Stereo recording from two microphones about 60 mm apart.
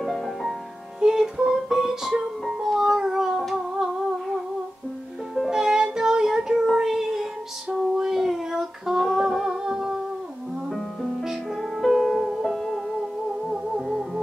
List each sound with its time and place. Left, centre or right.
0.0 s music: centre
1.0 s music: centre
5.5 s child singing: centre
7.7 s female singing: centre
10.7 s music: centre